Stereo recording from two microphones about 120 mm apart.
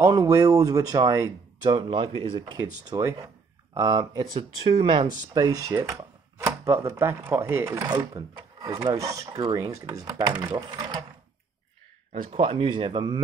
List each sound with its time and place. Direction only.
0.0 s speech: 30° right (ahead or behind)
1.6 s speech: 40° right (ahead or behind)
4.4 s speech: 45° right (ahead or behind)
5.3 s speech: 30° right (ahead or behind)
12.4 s speech: 50° right (ahead or behind)